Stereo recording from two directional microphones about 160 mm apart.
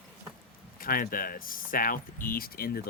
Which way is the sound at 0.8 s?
60° left (ahead or behind).